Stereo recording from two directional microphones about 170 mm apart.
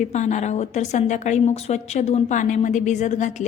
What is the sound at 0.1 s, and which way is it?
A woman's voice, 45° left (ahead or behind).